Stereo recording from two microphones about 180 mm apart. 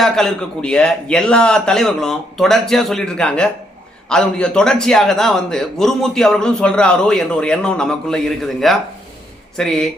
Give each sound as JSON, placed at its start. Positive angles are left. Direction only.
{"t": 0.0, "sound": "a man's voice", "side_deg": 5}